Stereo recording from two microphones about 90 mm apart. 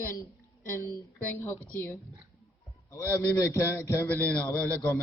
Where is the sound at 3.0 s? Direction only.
35° left (ahead or behind).